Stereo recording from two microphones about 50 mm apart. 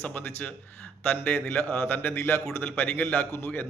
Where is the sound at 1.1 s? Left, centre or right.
Left.